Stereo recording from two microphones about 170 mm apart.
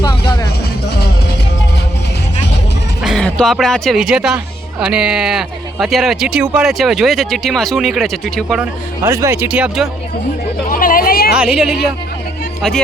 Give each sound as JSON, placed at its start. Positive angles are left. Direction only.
{"t": 0.0, "sound": "music", "side_deg": 25}
{"t": 3.0, "sound": "speech", "side_deg": 0}
{"t": 9.0, "sound": "speech", "side_deg": -15}
{"t": 10.7, "sound": "hubbub", "side_deg": 55}
{"t": 11.3, "sound": "speech", "side_deg": -5}